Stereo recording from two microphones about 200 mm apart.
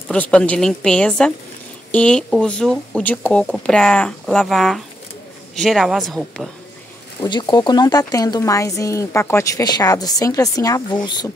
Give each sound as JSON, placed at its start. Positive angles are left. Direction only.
{"t": 0.1, "sound": "speech", "side_deg": 5}
{"t": 7.2, "sound": "speech", "side_deg": 20}